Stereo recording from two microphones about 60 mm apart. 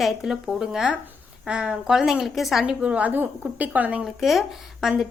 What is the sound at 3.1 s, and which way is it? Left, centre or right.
Speech, right.